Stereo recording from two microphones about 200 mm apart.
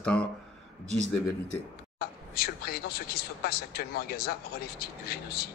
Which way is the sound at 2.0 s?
50° left (ahead or behind).